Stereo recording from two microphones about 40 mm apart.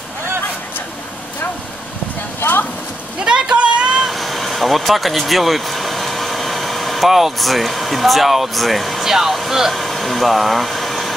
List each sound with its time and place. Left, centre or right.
3.3 s a sound: centre
4.0 s vehicle: centre
9.1 s speech: centre